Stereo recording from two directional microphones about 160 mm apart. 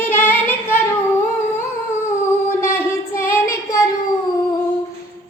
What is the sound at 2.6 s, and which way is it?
Child singing, 15° left (ahead or behind).